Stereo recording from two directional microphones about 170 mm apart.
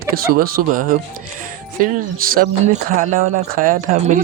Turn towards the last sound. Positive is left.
turn(degrees=-55)  # may be behind; listen again after turning